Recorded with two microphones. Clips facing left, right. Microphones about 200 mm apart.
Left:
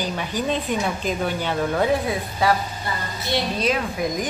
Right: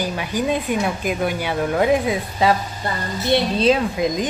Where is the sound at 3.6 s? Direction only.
25° right (ahead or behind).